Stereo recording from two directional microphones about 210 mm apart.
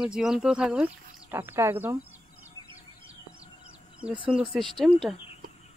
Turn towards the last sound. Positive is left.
turn(degrees=0)  # may be behind; listen again after turning